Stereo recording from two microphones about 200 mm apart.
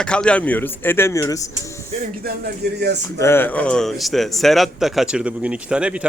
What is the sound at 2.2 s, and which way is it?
Speech, 50° right (ahead or behind).